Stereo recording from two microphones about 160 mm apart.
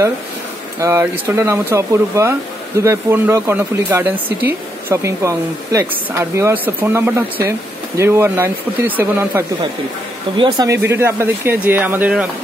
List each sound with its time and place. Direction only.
0.7 s speech: 15° right (ahead or behind)
10.3 s speech: 30° right (ahead or behind)
10.7 s speech: 15° right (ahead or behind)